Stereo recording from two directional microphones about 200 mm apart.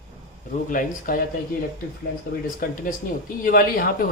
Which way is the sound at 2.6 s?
45° left (ahead or behind).